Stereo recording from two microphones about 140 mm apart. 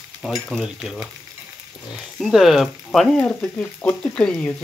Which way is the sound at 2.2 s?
Centre (ahead or behind).